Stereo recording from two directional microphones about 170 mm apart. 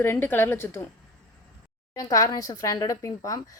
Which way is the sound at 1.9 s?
20° left (ahead or behind).